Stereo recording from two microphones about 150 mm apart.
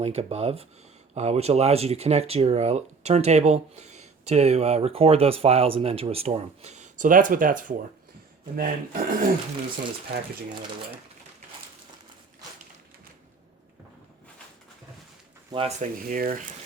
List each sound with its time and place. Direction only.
0.0 s speech: 45° right (ahead or behind); by 7.8 s 65° right (ahead or behind)
8.5 s speech: 75° right (ahead or behind)
15.5 s speech: 45° right (ahead or behind)
16.0 s speech: 70° right (ahead or behind)